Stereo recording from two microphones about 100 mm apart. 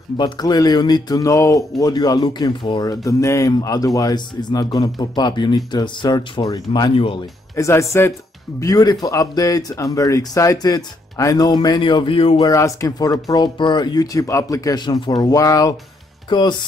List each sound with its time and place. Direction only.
0.2 s speech: 40° left (ahead or behind)
7.5 s speech: 30° left (ahead or behind)
8.5 s speech: 35° left (ahead or behind); by 12.4 s 60° left (ahead or behind)
12.4 s speech: 35° left (ahead or behind)
16.3 s speech: 50° left (ahead or behind)